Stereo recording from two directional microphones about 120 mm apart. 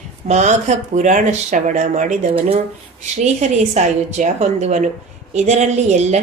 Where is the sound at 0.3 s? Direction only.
75° right (ahead or behind).